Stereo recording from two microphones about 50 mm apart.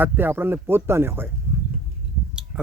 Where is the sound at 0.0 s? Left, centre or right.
Right.